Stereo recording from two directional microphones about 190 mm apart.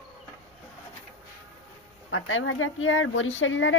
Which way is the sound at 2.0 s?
90° left.